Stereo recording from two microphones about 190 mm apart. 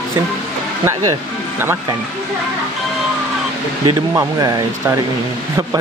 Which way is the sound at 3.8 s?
20° right (ahead or behind).